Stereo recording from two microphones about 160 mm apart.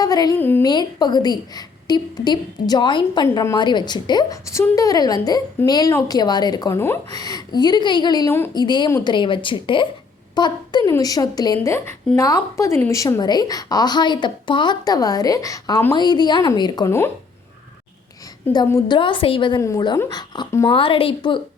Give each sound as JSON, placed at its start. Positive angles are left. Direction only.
{"t": 0.0, "sound": "a woman's voice", "side_deg": 25}
{"t": 0.3, "sound": "a woman's voice", "side_deg": 10}
{"t": 0.6, "sound": "a woman's voice", "side_deg": 25}
{"t": 18.5, "sound": "a woman's voice", "side_deg": 25}
{"t": 20.7, "sound": "a woman's voice", "side_deg": 35}